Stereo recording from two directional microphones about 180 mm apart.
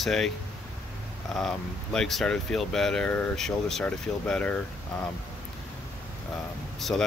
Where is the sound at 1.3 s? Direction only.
Centre (ahead or behind).